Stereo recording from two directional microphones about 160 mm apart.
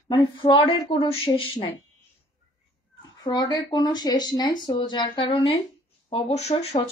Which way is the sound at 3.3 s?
25° left (ahead or behind).